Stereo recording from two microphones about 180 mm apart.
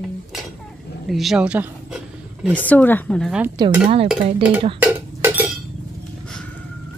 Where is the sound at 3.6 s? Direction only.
25° right (ahead or behind).